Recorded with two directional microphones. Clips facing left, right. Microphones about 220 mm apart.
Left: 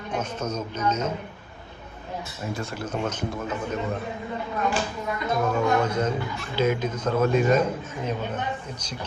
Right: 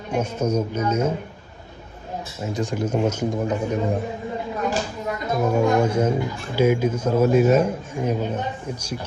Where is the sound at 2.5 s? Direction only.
15° right (ahead or behind).